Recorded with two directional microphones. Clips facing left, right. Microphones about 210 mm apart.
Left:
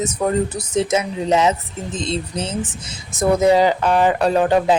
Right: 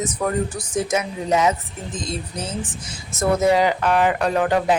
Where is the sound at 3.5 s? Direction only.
30° left (ahead or behind).